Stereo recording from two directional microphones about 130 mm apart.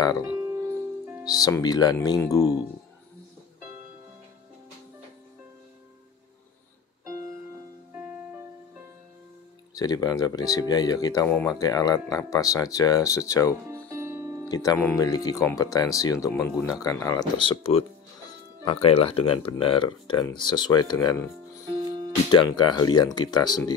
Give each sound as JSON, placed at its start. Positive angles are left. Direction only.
{"t": 0.4, "sound": "music", "side_deg": -20}
{"t": 1.2, "sound": "speech", "side_deg": 30}
{"t": 7.9, "sound": "music", "side_deg": -15}
{"t": 9.8, "sound": "speech", "side_deg": 30}
{"t": 11.2, "sound": "speech", "side_deg": 15}
{"t": 11.5, "sound": "speech", "side_deg": 30}
{"t": 13.8, "sound": "music", "side_deg": -20}
{"t": 14.5, "sound": "speech", "side_deg": 30}
{"t": 17.4, "sound": "speech", "side_deg": 40}
{"t": 22.3, "sound": "speech", "side_deg": 35}